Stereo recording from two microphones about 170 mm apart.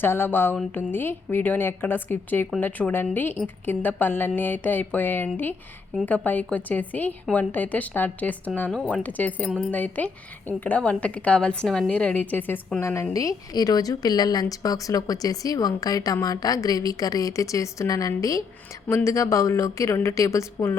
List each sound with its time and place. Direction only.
0.0 s a woman's voice: 10° left (ahead or behind)